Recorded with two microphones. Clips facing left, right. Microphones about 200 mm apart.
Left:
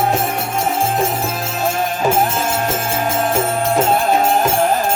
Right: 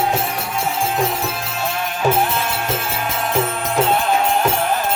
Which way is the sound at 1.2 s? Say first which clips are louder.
Left 4 dB; 45° left (ahead or behind).